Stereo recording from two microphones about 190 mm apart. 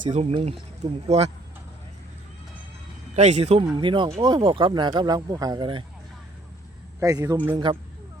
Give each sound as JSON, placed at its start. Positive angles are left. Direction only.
{"t": 0.1, "sound": "speech", "side_deg": -30}
{"t": 3.2, "sound": "speech", "side_deg": -35}
{"t": 7.0, "sound": "a man's voice", "side_deg": -15}
{"t": 7.5, "sound": "speech", "side_deg": -25}